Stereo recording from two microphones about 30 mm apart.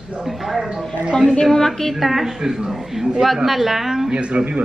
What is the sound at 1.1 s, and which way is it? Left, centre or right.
Speech, right.